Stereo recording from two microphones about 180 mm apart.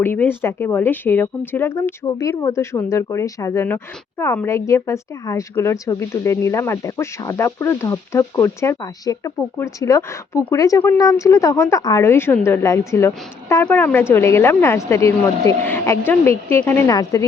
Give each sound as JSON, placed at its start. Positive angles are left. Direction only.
{"t": 0.0, "sound": "a woman's voice", "side_deg": 10}